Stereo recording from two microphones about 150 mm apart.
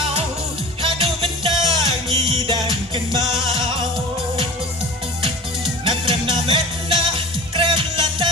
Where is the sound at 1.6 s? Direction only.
20° left (ahead or behind).